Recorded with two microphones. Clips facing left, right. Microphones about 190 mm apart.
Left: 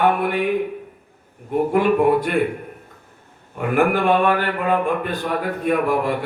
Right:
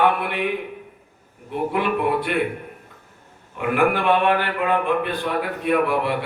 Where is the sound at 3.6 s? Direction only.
45° left (ahead or behind).